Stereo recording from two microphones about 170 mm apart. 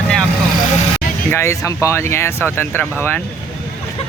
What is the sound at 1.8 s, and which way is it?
Speech, 15° left (ahead or behind).